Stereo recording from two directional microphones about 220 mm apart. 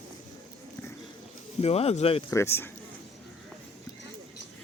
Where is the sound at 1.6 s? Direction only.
25° left (ahead or behind).